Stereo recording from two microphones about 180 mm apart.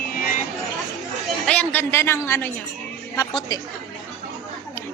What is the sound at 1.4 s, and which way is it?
A woman's voice, 10° left (ahead or behind).